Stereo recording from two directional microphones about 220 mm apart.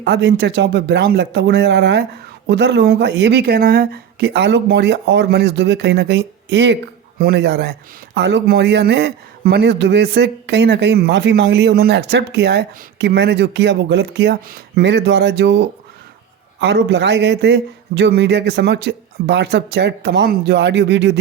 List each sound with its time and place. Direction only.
0.0 s speech: 50° right (ahead or behind)